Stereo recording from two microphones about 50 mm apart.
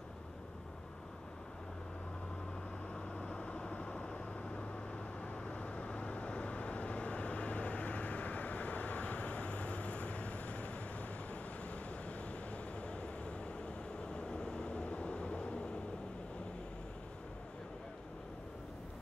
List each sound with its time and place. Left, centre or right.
2.9 s vehicle: centre